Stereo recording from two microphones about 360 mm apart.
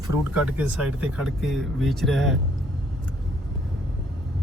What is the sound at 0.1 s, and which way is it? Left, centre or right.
Speech, centre.